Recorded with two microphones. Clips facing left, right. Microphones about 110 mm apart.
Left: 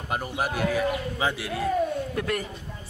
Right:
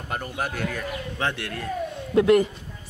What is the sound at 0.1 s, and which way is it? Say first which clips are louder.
Speech: left 2 dB; 10° left (ahead or behind).